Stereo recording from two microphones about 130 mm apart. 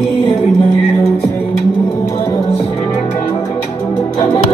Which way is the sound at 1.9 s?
25° left (ahead or behind).